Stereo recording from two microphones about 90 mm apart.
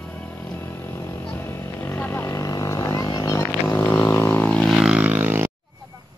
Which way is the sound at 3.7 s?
15° left (ahead or behind).